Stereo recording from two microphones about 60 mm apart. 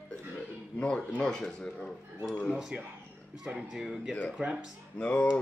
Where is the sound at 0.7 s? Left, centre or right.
Centre.